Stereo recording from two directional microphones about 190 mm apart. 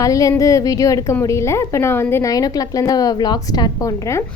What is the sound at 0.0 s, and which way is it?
A woman's voice, 15° left (ahead or behind).